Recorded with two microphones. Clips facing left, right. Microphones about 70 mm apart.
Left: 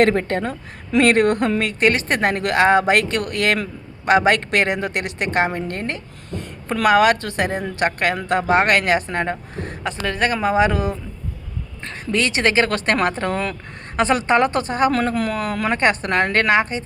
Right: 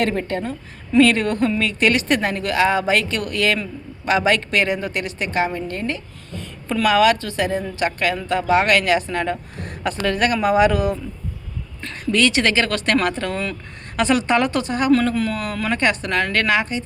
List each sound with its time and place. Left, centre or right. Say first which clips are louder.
0.0 s a woman's voice: left 4 dB; left
1.8 s speech: even; left
9.3 s speech: even; left